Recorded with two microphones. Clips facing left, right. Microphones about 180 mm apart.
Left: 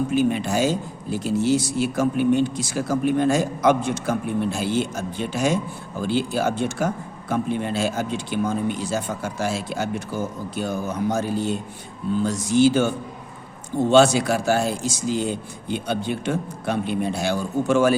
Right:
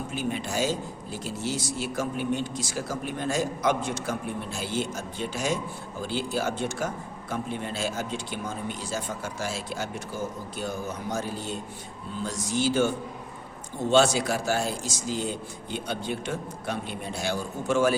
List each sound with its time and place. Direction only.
0.1 s a man's voice: 65° left (ahead or behind)
11.1 s a man's voice: 65° left (ahead or behind)
13.9 s a man's voice: 65° left (ahead or behind)